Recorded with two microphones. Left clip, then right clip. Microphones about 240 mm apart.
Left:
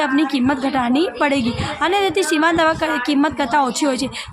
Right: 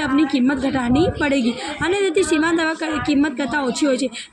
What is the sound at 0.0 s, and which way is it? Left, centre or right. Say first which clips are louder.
A woman's voice: left 1 dB; left.